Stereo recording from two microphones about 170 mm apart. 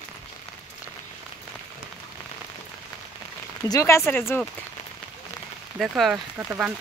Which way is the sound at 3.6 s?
20° left (ahead or behind).